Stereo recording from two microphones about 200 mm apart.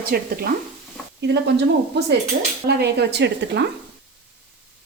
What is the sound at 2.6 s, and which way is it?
Speech, 55° right (ahead or behind).